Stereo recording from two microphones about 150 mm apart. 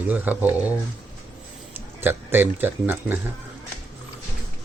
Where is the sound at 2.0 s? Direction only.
15° right (ahead or behind).